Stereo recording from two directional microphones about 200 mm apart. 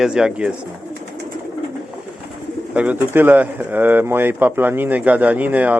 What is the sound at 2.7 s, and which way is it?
Speech, 5° right (ahead or behind).